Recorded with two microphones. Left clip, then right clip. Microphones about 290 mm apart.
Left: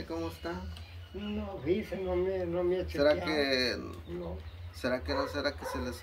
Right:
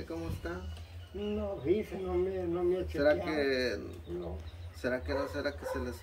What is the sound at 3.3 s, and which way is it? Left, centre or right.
Speech, centre.